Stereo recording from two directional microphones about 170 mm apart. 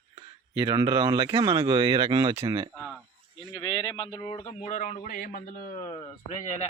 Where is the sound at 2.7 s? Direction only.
Centre (ahead or behind).